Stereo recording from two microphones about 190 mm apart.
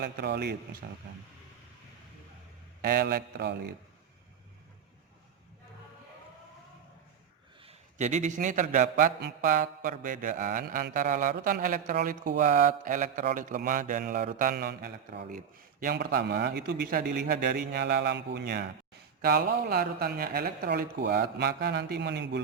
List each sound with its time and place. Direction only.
0.0 s speech: 60° right (ahead or behind)
2.8 s speech: 50° right (ahead or behind)
7.6 s a man's voice: 35° right (ahead or behind); by 22.4 s 65° right (ahead or behind)